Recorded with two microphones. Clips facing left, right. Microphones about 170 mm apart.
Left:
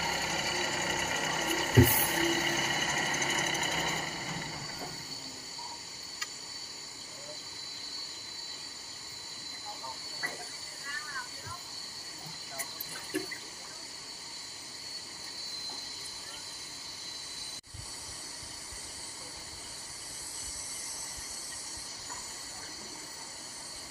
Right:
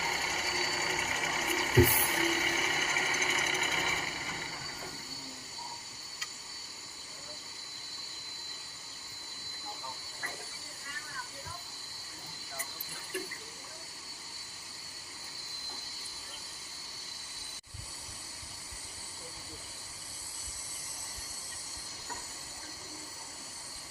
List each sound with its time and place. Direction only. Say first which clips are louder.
0.0 s sewing machine: left 2 dB; 50° left (ahead or behind)